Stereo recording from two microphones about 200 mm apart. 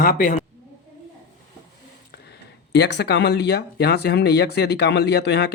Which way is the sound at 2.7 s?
60° left (ahead or behind).